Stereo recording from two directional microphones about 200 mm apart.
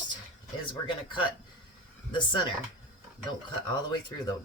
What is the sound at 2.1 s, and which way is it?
Speech, 25° left (ahead or behind).